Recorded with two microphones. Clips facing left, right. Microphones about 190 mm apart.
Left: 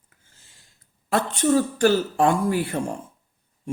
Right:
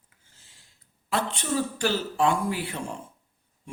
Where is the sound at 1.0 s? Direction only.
45° left (ahead or behind).